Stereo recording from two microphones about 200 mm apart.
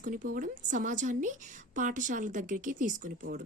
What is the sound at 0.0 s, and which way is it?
Speech, 40° right (ahead or behind).